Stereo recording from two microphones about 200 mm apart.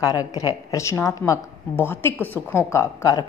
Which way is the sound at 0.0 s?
20° left (ahead or behind).